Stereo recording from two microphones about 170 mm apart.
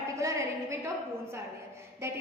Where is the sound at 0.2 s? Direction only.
15° right (ahead or behind).